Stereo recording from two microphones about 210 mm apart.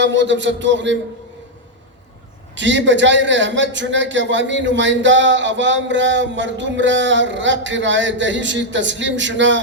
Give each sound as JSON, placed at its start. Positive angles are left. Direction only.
{"t": 0.0, "sound": "a man's voice", "side_deg": -60}
{"t": 2.6, "sound": "a man's voice", "side_deg": -60}